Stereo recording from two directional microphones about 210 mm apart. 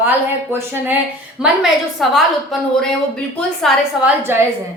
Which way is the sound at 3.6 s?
10° right (ahead or behind).